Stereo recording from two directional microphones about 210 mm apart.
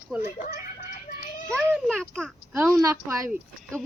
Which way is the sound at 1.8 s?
Centre (ahead or behind).